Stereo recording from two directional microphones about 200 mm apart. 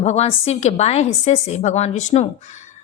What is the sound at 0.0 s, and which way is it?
A woman's voice, 35° left (ahead or behind).